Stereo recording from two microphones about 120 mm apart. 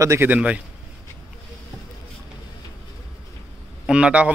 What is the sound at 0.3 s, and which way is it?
Speech, 10° right (ahead or behind).